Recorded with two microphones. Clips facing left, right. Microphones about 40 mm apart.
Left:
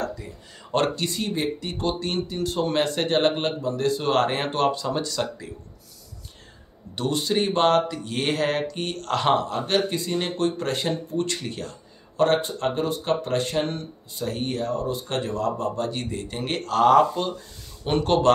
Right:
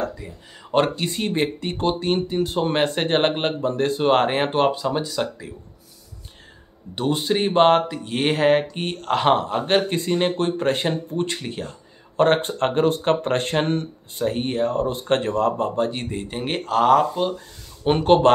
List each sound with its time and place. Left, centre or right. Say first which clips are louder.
0.7 s speech: right 3 dB; centre
1.1 s speech: right 3 dB; right; by 5.5 s centre
7.0 s speech: right 2 dB; right
12.2 s speech: right 3 dB; right
14.2 s speech: right 5 dB; right
16.8 s speech: even; centre
17.8 s speech: right 5 dB; right